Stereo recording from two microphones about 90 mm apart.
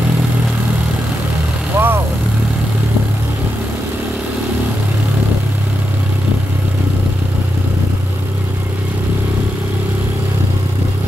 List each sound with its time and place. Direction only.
1.8 s vehicle: 25° right (ahead or behind)